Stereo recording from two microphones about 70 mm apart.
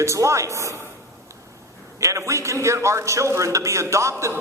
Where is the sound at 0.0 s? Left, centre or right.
Right.